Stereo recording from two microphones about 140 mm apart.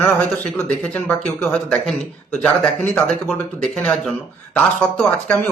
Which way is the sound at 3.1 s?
Centre (ahead or behind).